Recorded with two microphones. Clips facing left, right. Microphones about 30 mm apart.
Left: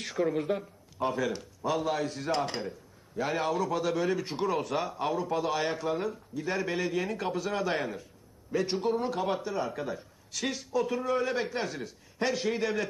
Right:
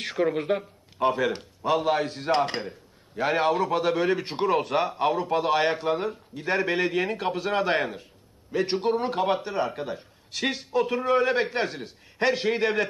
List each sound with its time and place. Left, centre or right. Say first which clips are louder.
0.0 s a man's voice: right 4 dB; right